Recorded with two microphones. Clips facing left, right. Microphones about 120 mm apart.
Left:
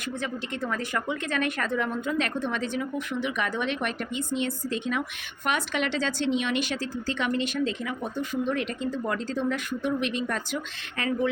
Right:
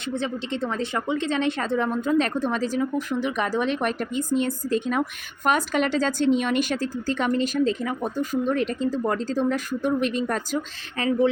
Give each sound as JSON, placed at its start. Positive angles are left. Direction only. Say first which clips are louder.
{"t": 0.1, "sound": "a woman's voice", "louder": "right 5 dB", "side_deg": -30}